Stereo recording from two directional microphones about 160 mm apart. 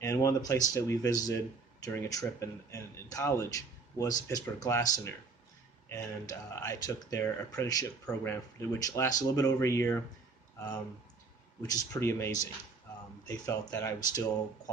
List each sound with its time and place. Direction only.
0.0 s a sound: 20° left (ahead or behind)
0.7 s speech: 20° left (ahead or behind)
11.6 s speech: 20° left (ahead or behind)